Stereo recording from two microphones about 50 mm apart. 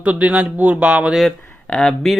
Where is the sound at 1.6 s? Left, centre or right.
Centre.